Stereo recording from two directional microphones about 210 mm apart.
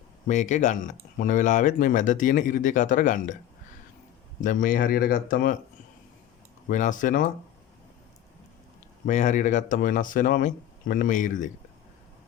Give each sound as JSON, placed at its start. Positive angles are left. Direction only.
{"t": 0.3, "sound": "speech", "side_deg": 35}
{"t": 4.4, "sound": "speech", "side_deg": 40}
{"t": 6.7, "sound": "speech", "side_deg": 35}
{"t": 9.0, "sound": "speech", "side_deg": 35}